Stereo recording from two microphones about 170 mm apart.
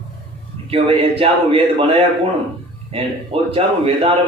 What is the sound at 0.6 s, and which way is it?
Male singing, 35° right (ahead or behind).